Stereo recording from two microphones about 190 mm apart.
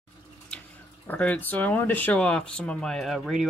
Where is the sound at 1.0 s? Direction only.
10° left (ahead or behind).